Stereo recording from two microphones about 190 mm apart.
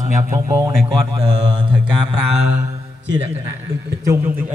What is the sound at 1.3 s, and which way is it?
Speech, 30° right (ahead or behind).